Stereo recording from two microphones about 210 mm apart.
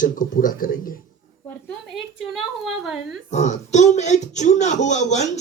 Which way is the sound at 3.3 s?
35° left (ahead or behind).